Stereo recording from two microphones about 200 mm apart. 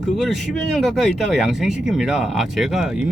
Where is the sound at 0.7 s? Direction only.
Centre (ahead or behind).